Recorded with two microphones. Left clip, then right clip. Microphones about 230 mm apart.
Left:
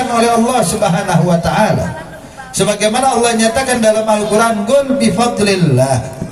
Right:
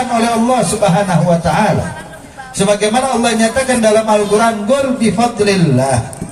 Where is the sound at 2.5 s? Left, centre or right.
Left.